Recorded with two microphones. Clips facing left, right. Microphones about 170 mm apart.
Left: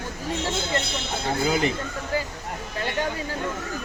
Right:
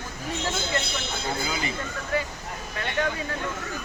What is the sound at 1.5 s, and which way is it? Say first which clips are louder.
Speech: left 8 dB; 60° left (ahead or behind).